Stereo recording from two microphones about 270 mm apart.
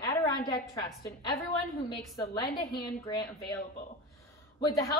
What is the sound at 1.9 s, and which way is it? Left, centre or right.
A woman's voice, centre.